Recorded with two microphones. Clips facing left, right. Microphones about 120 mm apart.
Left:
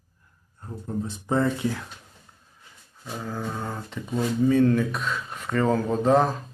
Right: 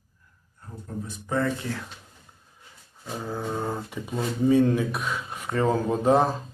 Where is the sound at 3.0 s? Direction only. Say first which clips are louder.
Right 1 dB; 15° right (ahead or behind).